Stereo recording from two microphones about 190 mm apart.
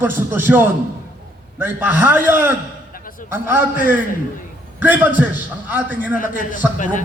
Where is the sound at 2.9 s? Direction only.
45° left (ahead or behind).